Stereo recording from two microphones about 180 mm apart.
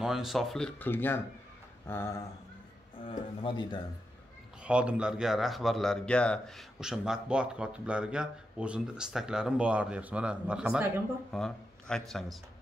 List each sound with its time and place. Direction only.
0.0 s speech: centre (ahead or behind)
3.0 s speech: 30° left (ahead or behind)
4.6 s speech: 5° right (ahead or behind)